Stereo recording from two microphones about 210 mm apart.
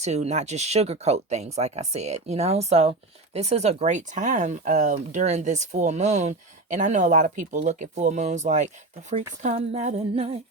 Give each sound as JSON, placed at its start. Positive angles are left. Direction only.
{"t": 0.0, "sound": "speech", "side_deg": -30}